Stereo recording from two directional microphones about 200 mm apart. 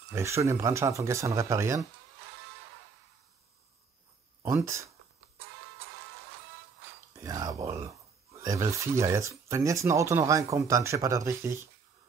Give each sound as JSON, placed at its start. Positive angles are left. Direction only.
{"t": 0.1, "sound": "speech", "side_deg": -15}
{"t": 4.4, "sound": "speech", "side_deg": -15}
{"t": 7.2, "sound": "speech", "side_deg": -15}